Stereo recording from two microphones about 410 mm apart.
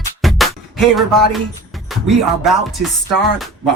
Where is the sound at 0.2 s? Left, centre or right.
Centre.